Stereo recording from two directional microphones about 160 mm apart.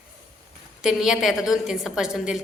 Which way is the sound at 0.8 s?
5° right (ahead or behind).